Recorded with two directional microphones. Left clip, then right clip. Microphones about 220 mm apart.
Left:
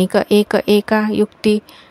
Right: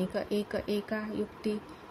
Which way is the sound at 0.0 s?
50° left (ahead or behind).